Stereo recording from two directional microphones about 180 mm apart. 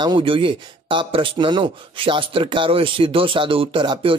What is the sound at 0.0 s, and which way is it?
A man's voice, 25° right (ahead or behind).